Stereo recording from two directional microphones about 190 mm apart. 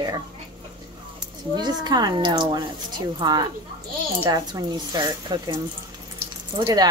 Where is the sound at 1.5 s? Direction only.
20° right (ahead or behind).